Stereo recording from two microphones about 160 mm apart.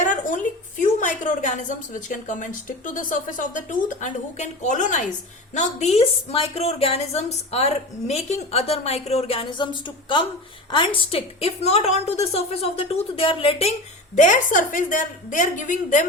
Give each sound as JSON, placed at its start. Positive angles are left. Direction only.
{"t": 0.0, "sound": "a woman's voice", "side_deg": 55}
{"t": 14.2, "sound": "a woman's voice", "side_deg": 55}